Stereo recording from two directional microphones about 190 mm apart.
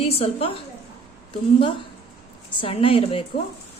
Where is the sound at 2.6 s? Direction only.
30° left (ahead or behind).